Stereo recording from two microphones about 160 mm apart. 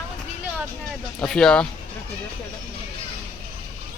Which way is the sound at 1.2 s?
5° left (ahead or behind).